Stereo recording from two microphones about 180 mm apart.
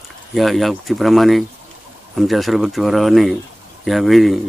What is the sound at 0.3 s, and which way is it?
Speech, centre (ahead or behind).